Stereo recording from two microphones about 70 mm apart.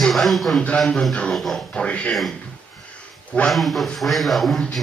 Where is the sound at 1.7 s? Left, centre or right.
Centre.